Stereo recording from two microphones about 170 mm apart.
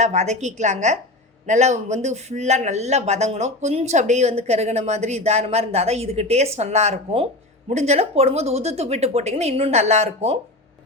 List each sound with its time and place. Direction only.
0.0 s a woman's voice: 40° right (ahead or behind)